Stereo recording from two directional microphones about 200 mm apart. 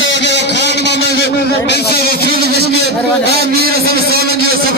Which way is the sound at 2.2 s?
55° right (ahead or behind).